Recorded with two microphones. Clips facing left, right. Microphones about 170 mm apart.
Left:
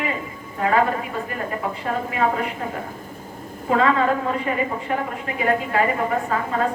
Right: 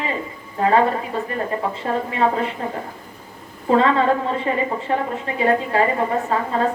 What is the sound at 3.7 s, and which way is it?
A woman's voice, 30° right (ahead or behind).